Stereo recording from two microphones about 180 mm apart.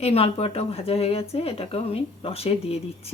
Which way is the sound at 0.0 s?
35° left (ahead or behind).